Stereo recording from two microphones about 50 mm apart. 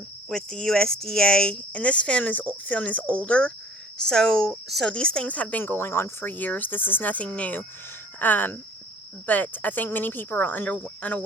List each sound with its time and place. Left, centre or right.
0.3 s speech: centre
1.5 s speech: left
3.9 s speech: centre; by 6.1 s left
6.2 s speech: left